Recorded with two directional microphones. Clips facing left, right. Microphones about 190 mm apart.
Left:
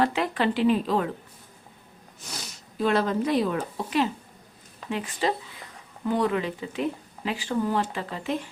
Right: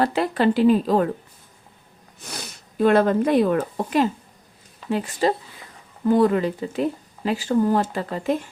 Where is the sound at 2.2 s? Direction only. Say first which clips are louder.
Right 4 dB; 60° right (ahead or behind).